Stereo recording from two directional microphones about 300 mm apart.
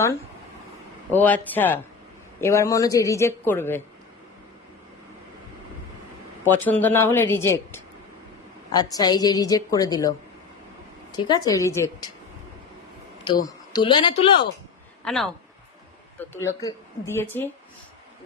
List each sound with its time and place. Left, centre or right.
1.1 s speech: centre
6.4 s speech: centre
11.2 s speech: centre
13.2 s speech: centre
15.0 s speech: centre